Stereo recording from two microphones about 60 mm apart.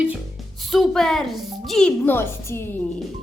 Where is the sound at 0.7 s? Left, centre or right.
Centre.